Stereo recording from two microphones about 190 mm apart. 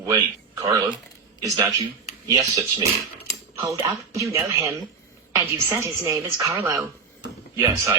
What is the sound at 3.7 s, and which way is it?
A woman's voice, 15° right (ahead or behind).